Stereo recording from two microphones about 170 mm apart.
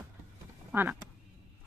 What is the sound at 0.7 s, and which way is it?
Quack, 10° right (ahead or behind).